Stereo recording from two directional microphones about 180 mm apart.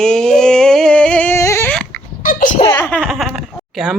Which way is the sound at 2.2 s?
45° left (ahead or behind).